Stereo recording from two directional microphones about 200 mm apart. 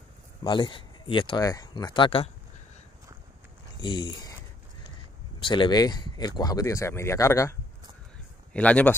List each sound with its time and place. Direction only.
0.4 s speech: 25° left (ahead or behind)
3.8 s speech: 25° left (ahead or behind)
5.4 s speech: 25° left (ahead or behind)
8.5 s speech: 5° left (ahead or behind)